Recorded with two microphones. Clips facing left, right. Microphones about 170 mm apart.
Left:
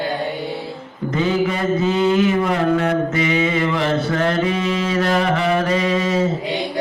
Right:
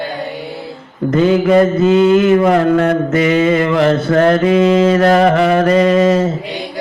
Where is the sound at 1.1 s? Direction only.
55° right (ahead or behind).